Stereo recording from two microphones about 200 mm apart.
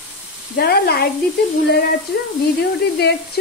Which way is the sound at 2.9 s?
55° left (ahead or behind).